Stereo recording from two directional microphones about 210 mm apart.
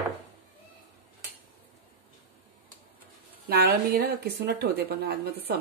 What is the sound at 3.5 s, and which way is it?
A woman's voice, 50° right (ahead or behind).